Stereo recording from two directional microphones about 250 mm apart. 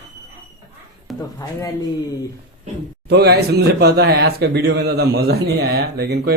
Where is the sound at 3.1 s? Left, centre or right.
Right.